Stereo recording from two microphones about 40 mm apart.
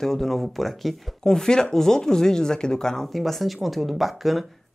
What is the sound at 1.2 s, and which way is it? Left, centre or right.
Speech, centre.